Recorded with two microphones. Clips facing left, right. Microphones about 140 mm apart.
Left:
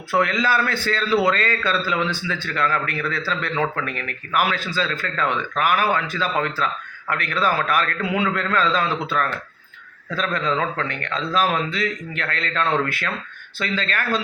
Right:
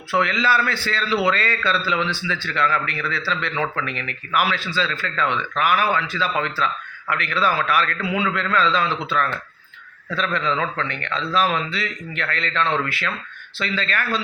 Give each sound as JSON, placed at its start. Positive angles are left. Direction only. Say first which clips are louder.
{"t": 0.1, "sound": "a man's voice", "louder": "even", "side_deg": 45}